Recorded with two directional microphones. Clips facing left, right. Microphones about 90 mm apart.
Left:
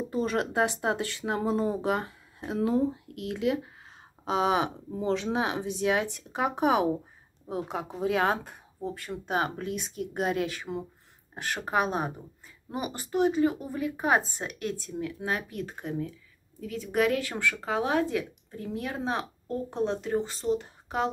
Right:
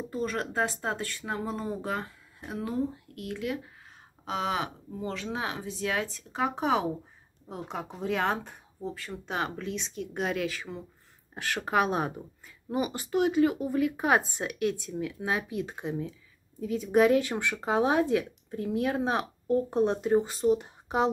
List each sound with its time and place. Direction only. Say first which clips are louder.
0.1 s speech: left 3 dB; 20° left (ahead or behind); by 8.4 s 5° left (ahead or behind)
9.3 s speech: left 3 dB; 50° left (ahead or behind)
10.7 s speech: left 5 dB; 15° left (ahead or behind)
11.4 s speech: right 1 dB; centre (ahead or behind); by 21.1 s 15° right (ahead or behind)